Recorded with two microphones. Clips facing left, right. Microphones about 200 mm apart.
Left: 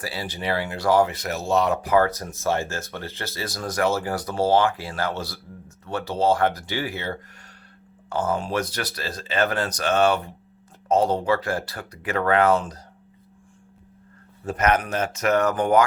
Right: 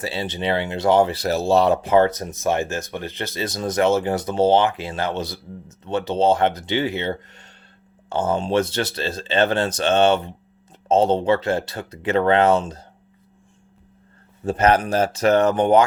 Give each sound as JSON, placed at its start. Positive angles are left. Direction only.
{"t": 0.0, "sound": "speech", "side_deg": -25}
{"t": 14.4, "sound": "speech", "side_deg": -30}